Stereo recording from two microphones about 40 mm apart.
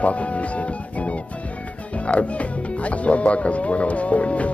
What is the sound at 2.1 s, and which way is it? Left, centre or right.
Speech, left.